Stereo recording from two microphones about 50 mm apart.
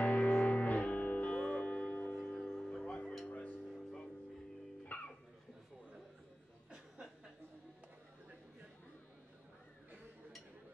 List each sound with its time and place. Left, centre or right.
0.0 s music: left
2.5 s music: centre
3.6 s music: centre
4.8 s music: left